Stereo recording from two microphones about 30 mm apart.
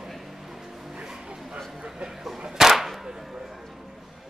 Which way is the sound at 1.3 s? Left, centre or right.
Centre.